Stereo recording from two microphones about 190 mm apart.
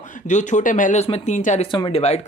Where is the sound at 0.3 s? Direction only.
40° left (ahead or behind).